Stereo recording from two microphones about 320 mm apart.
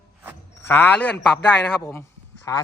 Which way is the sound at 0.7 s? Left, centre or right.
Centre.